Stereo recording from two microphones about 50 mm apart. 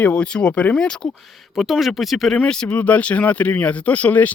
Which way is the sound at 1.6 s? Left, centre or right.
Centre.